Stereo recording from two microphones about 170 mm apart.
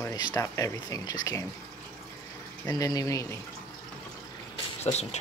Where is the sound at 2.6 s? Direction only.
20° left (ahead or behind).